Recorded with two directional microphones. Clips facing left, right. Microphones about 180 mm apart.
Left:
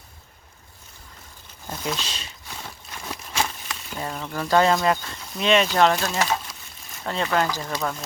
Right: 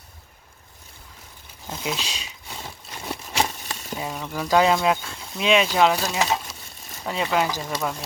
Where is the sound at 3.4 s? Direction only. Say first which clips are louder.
Right 2 dB; 35° right (ahead or behind).